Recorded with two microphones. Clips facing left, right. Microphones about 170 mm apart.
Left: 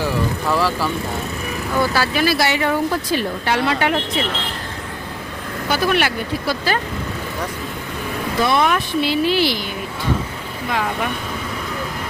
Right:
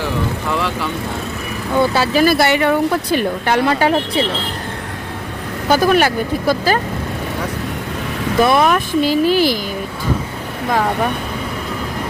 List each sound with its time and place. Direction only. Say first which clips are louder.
0.5 s vehicle: left 3 dB; 5° left (ahead or behind)
1.8 s speech: right 4 dB; 25° right (ahead or behind)
2.1 s speech: right 7 dB; 50° right (ahead or behind)
5.6 s speech: right 6 dB; 45° right (ahead or behind)
8.4 s speech: right 2 dB; 45° right (ahead or behind)